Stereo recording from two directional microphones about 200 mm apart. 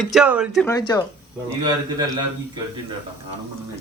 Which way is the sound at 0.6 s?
15° left (ahead or behind).